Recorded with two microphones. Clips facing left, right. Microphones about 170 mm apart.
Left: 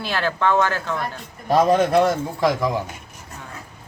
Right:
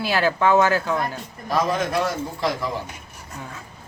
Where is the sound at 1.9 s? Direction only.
55° left (ahead or behind).